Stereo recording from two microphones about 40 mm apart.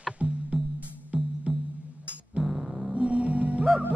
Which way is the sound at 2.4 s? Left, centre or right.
Centre.